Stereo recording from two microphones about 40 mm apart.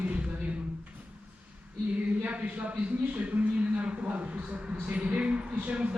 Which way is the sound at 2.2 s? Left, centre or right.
Right.